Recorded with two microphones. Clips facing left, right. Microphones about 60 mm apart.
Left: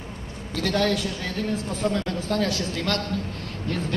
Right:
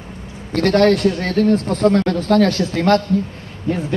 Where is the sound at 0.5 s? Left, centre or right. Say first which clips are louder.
Right 10 dB; right.